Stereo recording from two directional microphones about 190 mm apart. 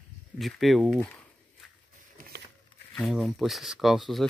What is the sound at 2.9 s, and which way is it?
Speech, centre (ahead or behind).